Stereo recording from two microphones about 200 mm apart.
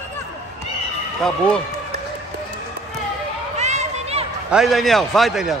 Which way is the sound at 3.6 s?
35° right (ahead or behind).